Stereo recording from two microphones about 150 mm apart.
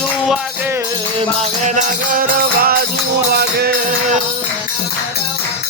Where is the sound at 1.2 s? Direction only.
50° right (ahead or behind); by 2.8 s 90° right.